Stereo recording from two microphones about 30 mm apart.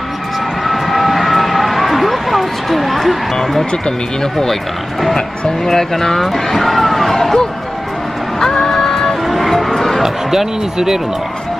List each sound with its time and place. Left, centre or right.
0.7 s vehicle: centre
3.8 s speech: centre
5.7 s speech: centre
8.4 s music: centre
9.3 s music: centre
10.0 s speech: centre